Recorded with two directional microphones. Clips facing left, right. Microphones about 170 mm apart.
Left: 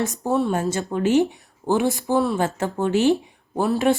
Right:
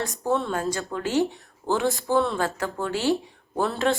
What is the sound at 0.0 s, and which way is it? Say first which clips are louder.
Speech: left 4 dB; 20° left (ahead or behind).